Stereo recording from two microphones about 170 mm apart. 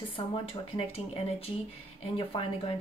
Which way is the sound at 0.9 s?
35° left (ahead or behind).